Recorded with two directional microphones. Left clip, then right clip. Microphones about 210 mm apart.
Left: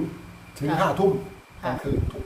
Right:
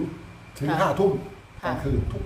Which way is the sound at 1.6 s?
20° right (ahead or behind).